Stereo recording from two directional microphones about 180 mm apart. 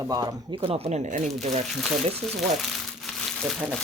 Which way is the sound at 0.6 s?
30° right (ahead or behind).